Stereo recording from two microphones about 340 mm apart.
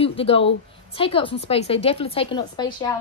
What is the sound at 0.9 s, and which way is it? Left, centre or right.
A woman's voice, centre.